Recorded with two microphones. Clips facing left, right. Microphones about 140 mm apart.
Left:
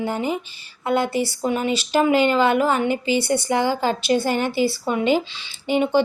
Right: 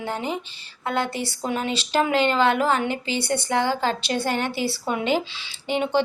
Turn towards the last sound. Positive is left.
turn(degrees=5)  # may be behind; listen again after turning